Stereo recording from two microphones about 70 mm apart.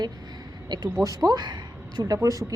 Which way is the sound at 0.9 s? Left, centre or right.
Right.